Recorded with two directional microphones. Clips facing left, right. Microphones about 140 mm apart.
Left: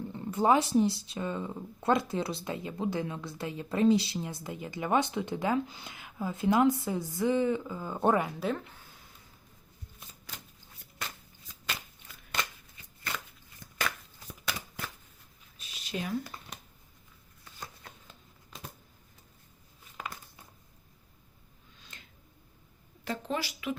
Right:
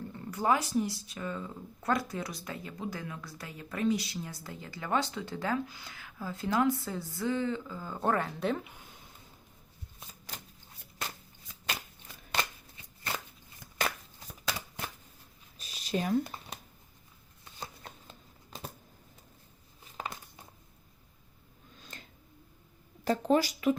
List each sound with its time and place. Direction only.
0.1 s speech: 25° left (ahead or behind)
8.4 s speech: centre (ahead or behind)
8.6 s speech: 15° right (ahead or behind)
12.3 s shuffling cards: 25° right (ahead or behind)
15.5 s a sound: 40° right (ahead or behind)
16.2 s a sound: 25° right (ahead or behind)
21.8 s tick-tock: 40° right (ahead or behind)
23.0 s speech: 40° right (ahead or behind)